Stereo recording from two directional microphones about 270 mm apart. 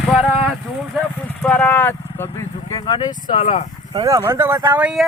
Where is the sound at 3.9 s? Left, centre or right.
Centre.